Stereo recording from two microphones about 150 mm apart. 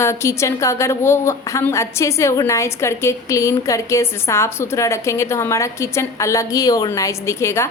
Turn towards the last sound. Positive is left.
turn(degrees=20)  # may be behind; listen again after turning